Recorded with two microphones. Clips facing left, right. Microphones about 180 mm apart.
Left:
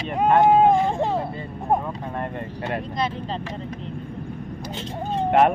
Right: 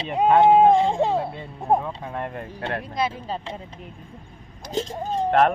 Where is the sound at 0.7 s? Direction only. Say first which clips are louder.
Right 1 dB; 25° right (ahead or behind).